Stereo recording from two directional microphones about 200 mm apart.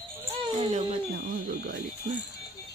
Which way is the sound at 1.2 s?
45° right (ahead or behind).